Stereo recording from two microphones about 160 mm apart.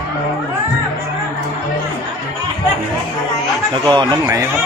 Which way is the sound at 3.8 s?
25° right (ahead or behind).